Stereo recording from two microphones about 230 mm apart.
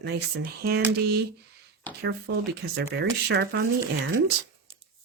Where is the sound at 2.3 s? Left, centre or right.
Right.